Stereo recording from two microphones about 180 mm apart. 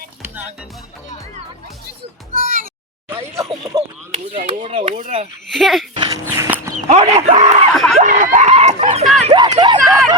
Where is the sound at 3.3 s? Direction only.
20° right (ahead or behind).